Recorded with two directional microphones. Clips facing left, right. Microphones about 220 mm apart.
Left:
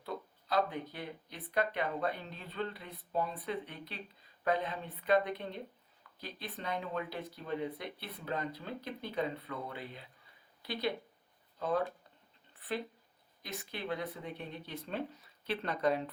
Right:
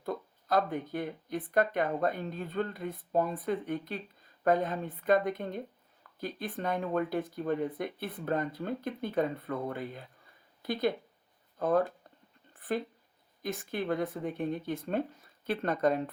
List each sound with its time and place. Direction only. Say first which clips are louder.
0.0 s speech: right 5 dB; 50° right (ahead or behind)
12.5 s a sound: right 5 dB; 45° right (ahead or behind)
13.4 s speech: right 8 dB; 50° right (ahead or behind)